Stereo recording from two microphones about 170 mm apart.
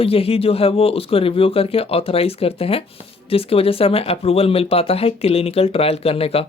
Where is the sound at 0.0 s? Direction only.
35° left (ahead or behind).